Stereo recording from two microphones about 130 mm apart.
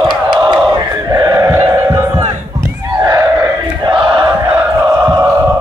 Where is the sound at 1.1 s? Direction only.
30° right (ahead or behind).